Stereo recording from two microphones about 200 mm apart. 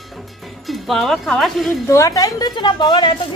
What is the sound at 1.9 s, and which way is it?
A woman's voice, 15° left (ahead or behind).